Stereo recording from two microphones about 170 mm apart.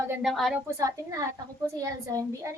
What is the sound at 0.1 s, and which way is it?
Speech, centre (ahead or behind).